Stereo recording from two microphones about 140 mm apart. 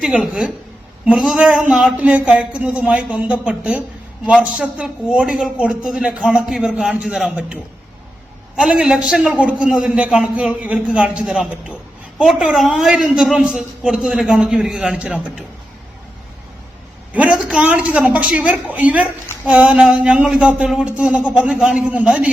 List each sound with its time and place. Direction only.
0.0 s a man's voice: 5° right (ahead or behind)
17.1 s a man's voice: 10° right (ahead or behind)